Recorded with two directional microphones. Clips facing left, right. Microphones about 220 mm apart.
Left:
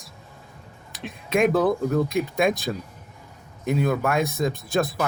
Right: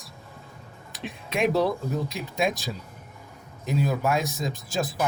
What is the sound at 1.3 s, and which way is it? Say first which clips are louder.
Speech: left 4 dB; 50° left (ahead or behind).